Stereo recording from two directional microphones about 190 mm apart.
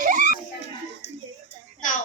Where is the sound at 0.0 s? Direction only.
40° right (ahead or behind).